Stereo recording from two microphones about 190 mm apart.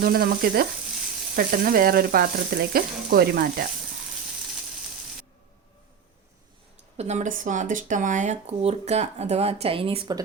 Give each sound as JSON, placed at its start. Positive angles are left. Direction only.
{"t": 0.0, "sound": "frying", "side_deg": -50}
{"t": 6.9, "sound": "speech", "side_deg": -35}